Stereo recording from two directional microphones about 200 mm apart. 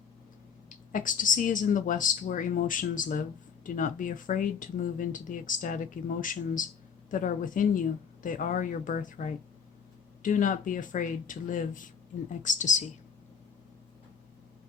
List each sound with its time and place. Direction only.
0.9 s speech: 40° left (ahead or behind)